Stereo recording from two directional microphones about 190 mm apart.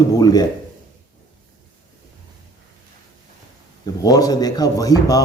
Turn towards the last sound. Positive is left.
turn(degrees=20)  # may be behind; listen again after turning